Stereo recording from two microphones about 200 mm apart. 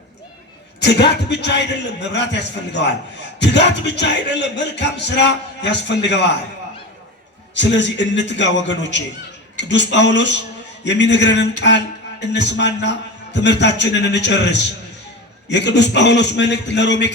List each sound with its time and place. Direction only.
0.8 s speech: 60° left (ahead or behind)
7.5 s speech: 60° left (ahead or behind)